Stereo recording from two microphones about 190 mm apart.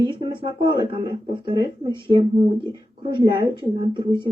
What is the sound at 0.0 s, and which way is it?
Speech, 25° right (ahead or behind).